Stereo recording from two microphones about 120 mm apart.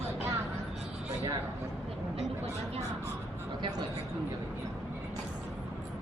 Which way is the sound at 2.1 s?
65° right (ahead or behind).